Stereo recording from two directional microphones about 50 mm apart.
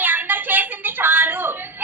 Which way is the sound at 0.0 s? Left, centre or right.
Right.